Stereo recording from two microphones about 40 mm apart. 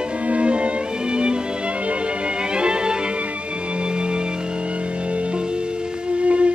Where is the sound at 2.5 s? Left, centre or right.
Right.